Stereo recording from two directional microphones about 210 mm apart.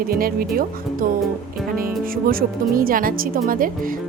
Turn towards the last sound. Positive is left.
turn(degrees=-40)  # may be behind; listen again after turning